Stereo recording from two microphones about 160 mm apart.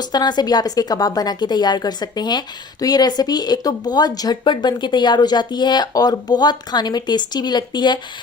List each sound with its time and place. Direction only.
0.0 s speech: 25° left (ahead or behind)